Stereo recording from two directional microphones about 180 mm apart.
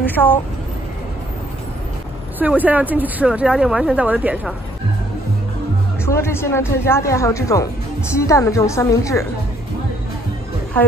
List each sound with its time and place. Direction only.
0.0 s a woman's voice: 10° left (ahead or behind)
2.3 s speech: 10° right (ahead or behind)
6.0 s speech: 15° left (ahead or behind)